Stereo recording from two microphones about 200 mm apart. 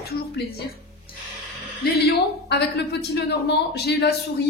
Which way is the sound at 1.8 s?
55° left (ahead or behind).